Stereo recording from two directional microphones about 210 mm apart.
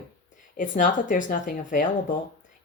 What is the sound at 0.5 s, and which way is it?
Speech, 40° left (ahead or behind).